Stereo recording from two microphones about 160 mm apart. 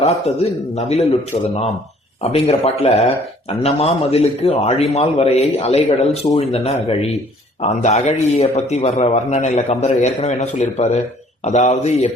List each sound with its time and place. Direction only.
0.4 s a man's voice: 40° left (ahead or behind)